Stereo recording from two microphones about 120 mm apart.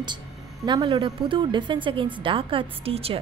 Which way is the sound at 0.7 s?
40° right (ahead or behind).